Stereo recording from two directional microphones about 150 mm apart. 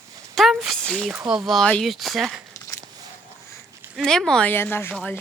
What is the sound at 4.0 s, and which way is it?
Speech, 5° left (ahead or behind).